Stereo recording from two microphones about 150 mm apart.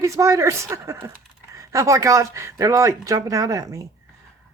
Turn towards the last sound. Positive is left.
turn(degrees=-20)  # may be behind; listen again after turning